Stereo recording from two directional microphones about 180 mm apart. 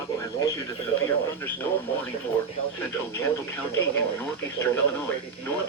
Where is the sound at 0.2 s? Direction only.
15° left (ahead or behind).